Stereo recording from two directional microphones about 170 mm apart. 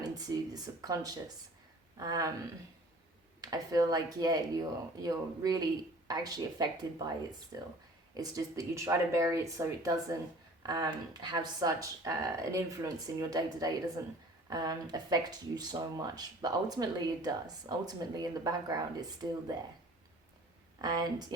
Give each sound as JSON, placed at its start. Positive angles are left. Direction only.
{"t": 0.3, "sound": "speech", "side_deg": -20}
{"t": 3.4, "sound": "speech", "side_deg": -20}
{"t": 20.8, "sound": "speech", "side_deg": -25}